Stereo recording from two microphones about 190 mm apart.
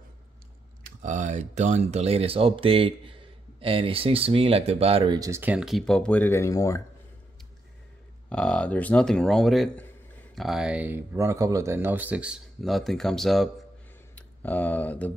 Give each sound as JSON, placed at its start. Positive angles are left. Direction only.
{"t": 1.0, "sound": "speech", "side_deg": -40}
{"t": 8.3, "sound": "speech", "side_deg": 5}